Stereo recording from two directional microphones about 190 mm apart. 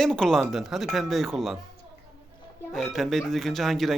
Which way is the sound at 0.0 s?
5° left (ahead or behind).